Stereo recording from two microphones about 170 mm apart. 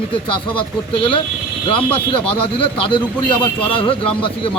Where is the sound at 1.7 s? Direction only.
30° left (ahead or behind).